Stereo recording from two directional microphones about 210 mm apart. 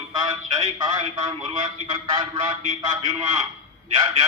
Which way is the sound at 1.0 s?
25° right (ahead or behind).